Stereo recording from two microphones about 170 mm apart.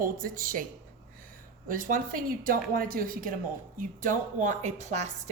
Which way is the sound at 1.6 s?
55° right (ahead or behind).